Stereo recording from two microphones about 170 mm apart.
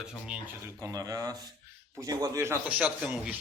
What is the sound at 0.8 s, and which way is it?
A man's voice, 20° right (ahead or behind).